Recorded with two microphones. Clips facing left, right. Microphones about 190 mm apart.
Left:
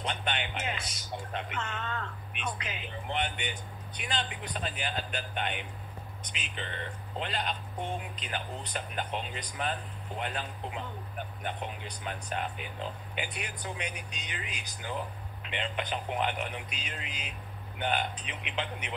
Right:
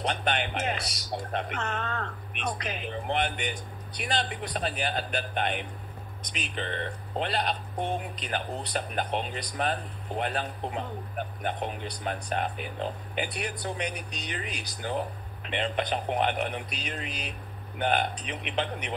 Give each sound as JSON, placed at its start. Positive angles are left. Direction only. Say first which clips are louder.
{"t": 0.0, "sound": "speech", "louder": "right 5 dB", "side_deg": -40}